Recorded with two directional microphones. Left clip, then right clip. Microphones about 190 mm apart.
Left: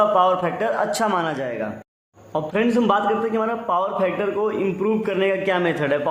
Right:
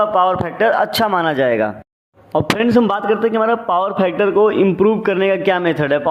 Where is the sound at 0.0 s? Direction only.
25° right (ahead or behind).